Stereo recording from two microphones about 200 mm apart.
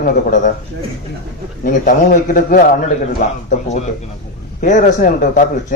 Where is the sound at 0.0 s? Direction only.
40° left (ahead or behind).